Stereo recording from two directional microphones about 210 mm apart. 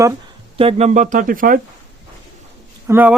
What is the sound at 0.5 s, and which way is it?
Speech, 30° right (ahead or behind).